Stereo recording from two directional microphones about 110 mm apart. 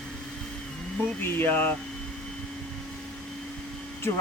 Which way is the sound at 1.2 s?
20° left (ahead or behind).